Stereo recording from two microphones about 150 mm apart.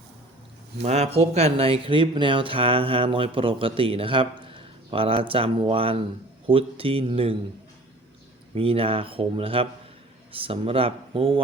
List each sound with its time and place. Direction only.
0.8 s speech: 45° right (ahead or behind)
8.5 s speech: 40° right (ahead or behind)